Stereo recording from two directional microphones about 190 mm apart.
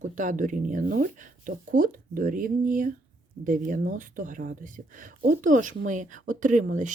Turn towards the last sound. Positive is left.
turn(degrees=-40)  # may be behind; listen again after turning